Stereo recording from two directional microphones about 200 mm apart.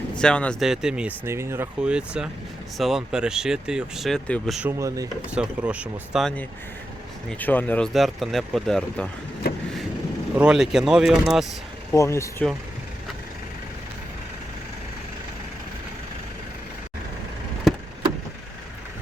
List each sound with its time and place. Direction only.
0.2 s speech: 5° left (ahead or behind)
4.8 s speech: 15° right (ahead or behind)
5.3 s speech: 5° right (ahead or behind)
9.5 s vehicle: 50° left (ahead or behind)
10.3 s speech: 5° right (ahead or behind)
11.9 s speech: 15° left (ahead or behind)